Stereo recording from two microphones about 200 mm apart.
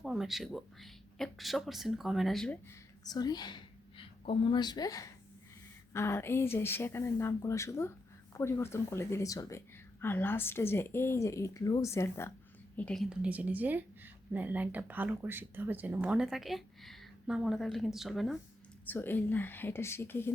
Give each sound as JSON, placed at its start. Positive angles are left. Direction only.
{"t": 0.0, "sound": "a woman's voice", "side_deg": 0}
{"t": 3.0, "sound": "a woman's voice", "side_deg": 20}